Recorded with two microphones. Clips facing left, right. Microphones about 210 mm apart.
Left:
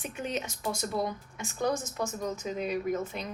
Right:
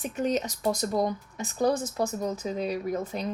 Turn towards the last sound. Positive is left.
turn(degrees=-35)  # may be behind; listen again after turning